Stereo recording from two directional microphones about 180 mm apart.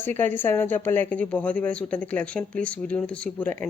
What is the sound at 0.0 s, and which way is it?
A woman's voice, 10° left (ahead or behind).